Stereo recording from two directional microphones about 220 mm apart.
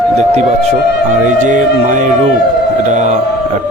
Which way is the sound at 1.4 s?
35° right (ahead or behind).